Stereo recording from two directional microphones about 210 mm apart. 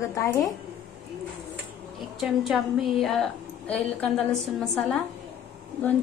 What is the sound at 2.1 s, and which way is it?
A woman's voice, centre (ahead or behind).